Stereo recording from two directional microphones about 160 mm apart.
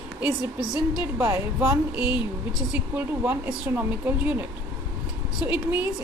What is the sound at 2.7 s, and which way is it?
A woman's voice, 10° right (ahead or behind).